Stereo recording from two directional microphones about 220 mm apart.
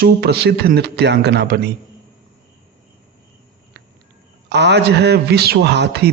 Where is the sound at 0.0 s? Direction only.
45° right (ahead or behind).